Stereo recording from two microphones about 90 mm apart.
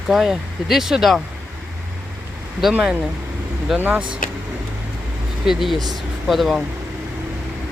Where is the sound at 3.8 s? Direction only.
20° right (ahead or behind).